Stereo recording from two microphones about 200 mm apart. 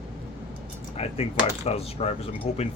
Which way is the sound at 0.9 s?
30° left (ahead or behind).